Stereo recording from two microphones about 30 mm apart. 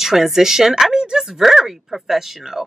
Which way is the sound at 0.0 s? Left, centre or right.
Centre.